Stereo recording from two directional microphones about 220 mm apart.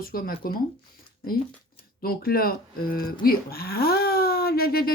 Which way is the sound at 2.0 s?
40° left (ahead or behind).